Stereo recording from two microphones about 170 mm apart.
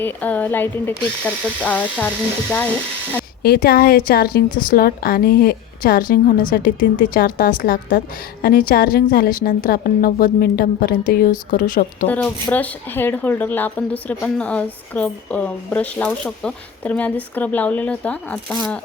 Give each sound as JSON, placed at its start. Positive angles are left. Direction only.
{"t": 0.0, "sound": "speech", "side_deg": 10}
{"t": 3.4, "sound": "a woman's voice", "side_deg": 60}
{"t": 12.0, "sound": "speech", "side_deg": 10}